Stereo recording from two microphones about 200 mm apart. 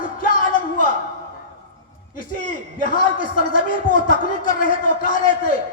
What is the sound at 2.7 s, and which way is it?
A man's voice, 40° left (ahead or behind).